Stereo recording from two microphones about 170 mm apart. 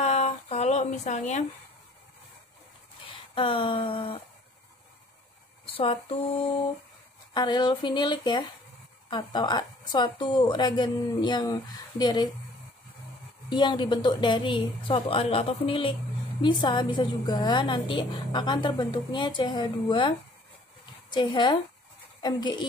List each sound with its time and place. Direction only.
0.0 s a sound: 40° left (ahead or behind)
3.3 s a woman's voice: 30° left (ahead or behind)
5.8 s a woman's voice: 35° left (ahead or behind)
7.3 s a woman's voice: 25° left (ahead or behind)
13.5 s a woman's voice: 25° left (ahead or behind)